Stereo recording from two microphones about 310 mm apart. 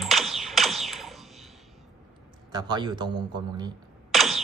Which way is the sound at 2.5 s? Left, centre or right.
Centre.